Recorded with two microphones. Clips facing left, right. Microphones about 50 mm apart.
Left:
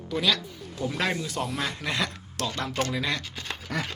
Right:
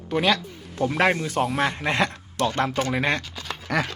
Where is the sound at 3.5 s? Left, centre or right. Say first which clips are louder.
Right 7 dB; right.